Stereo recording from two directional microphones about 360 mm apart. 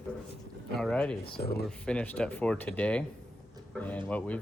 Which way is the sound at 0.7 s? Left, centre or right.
Centre.